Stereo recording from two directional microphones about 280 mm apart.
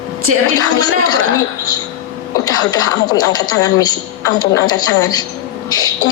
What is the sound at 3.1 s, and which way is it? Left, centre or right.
A woman's voice, centre.